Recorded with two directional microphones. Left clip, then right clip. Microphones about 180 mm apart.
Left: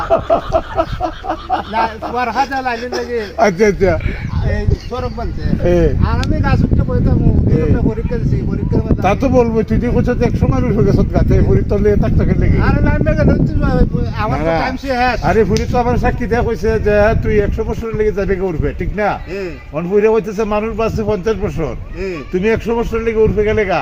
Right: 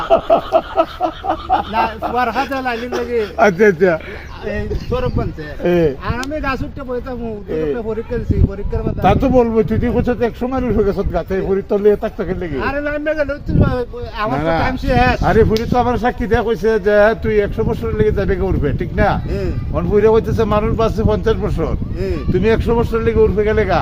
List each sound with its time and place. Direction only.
0.1 s a man's voice: 15° left (ahead or behind)
1.7 s speech: 35° right (ahead or behind)
3.3 s speech: 20° left (ahead or behind)
5.6 s speech: 25° left (ahead or behind)
9.0 s speech: 20° left (ahead or behind)
12.5 s speech: 15° right (ahead or behind)
14.3 s speech: 35° left (ahead or behind)
14.8 s speech: 15° right (ahead or behind)
15.2 s speech: 25° left (ahead or behind)
19.7 s a man's voice: 15° left (ahead or behind)